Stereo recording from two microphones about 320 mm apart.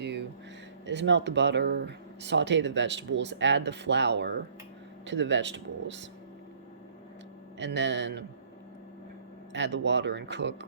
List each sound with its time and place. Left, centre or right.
0.0 s a sound: right
0.9 s speech: right
7.6 s speech: right
9.5 s speech: right